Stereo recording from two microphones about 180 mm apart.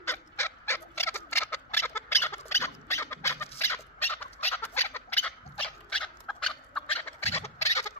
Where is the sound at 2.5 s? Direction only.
15° left (ahead or behind).